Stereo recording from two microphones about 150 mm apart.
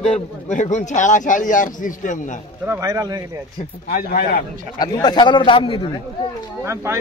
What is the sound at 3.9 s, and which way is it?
Speech, 70° left (ahead or behind).